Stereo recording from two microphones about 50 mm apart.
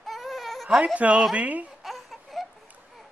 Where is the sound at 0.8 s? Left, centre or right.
Right.